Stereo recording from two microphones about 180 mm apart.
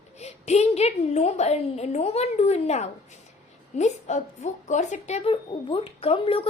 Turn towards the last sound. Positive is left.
turn(degrees=30)  # may be behind; listen again after turning